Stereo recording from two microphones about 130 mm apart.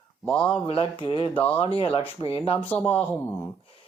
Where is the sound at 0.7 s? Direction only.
45° left (ahead or behind).